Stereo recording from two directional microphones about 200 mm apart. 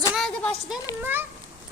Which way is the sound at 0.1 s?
Centre (ahead or behind).